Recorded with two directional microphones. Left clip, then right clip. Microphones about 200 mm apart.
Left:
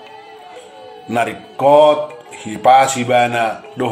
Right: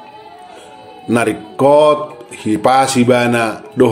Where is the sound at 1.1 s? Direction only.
35° right (ahead or behind).